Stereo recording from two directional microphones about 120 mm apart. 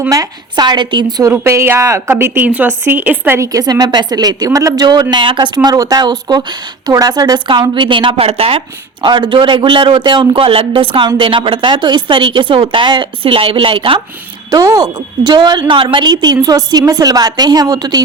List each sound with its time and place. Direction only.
0.1 s a woman's voice: 35° right (ahead or behind)
1.3 s speech: 20° right (ahead or behind); by 5.5 s 40° right (ahead or behind)
5.6 s a woman's voice: 30° right (ahead or behind); by 14.0 s 45° right (ahead or behind)
14.5 s a woman's voice: 30° right (ahead or behind)